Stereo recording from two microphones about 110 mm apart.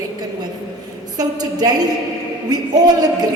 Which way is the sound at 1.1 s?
40° right (ahead or behind).